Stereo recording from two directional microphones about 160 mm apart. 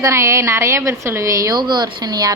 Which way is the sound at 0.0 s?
20° right (ahead or behind).